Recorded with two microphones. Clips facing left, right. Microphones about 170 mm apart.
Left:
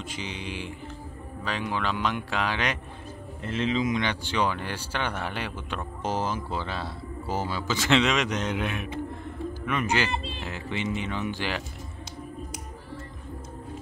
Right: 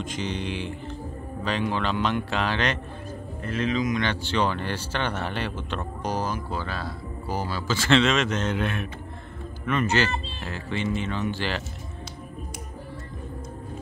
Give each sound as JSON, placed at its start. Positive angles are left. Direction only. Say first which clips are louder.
{"t": 0.0, "sound": "speech", "louder": "right 6 dB", "side_deg": 10}
{"t": 3.4, "sound": "speech", "louder": "right 1 dB", "side_deg": 25}
{"t": 6.0, "sound": "speech", "louder": "even", "side_deg": 25}